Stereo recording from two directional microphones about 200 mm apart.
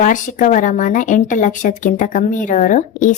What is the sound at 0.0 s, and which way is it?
Speech, 40° left (ahead or behind).